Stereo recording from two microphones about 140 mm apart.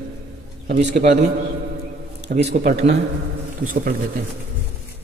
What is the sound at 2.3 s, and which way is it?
Speech, 60° right (ahead or behind).